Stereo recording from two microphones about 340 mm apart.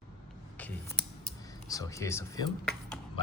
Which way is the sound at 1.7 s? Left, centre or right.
Centre.